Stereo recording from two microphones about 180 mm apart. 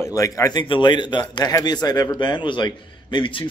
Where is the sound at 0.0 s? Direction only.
20° left (ahead or behind).